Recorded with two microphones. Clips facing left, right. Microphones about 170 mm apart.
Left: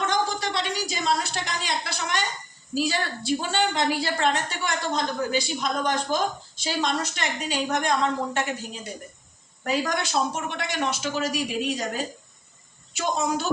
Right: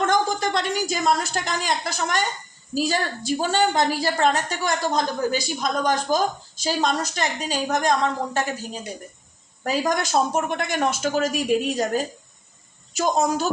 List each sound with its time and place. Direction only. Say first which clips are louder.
0.0 s a woman's voice: right 4 dB; 50° right (ahead or behind)
9.6 s a woman's voice: right 3 dB; 45° right (ahead or behind)